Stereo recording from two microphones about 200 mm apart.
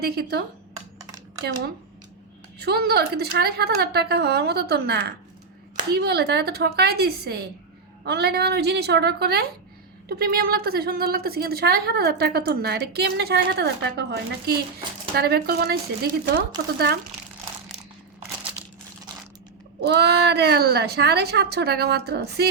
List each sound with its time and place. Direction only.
0.0 s a woman's voice: 50° right (ahead or behind)
0.9 s computer keyboard: 15° right (ahead or behind)
2.6 s a woman's voice: 50° right (ahead or behind)
19.8 s a woman's voice: 55° right (ahead or behind)